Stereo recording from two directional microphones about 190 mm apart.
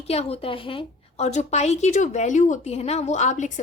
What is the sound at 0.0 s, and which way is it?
A woman's voice, 30° left (ahead or behind).